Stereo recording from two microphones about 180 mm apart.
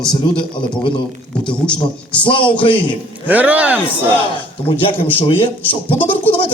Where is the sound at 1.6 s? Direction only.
5° left (ahead or behind).